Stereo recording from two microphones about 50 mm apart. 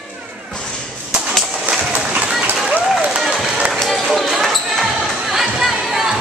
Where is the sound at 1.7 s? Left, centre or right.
Right.